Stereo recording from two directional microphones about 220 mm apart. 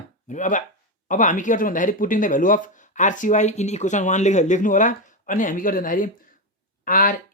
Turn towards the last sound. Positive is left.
turn(degrees=40)  # may be behind; listen again after turning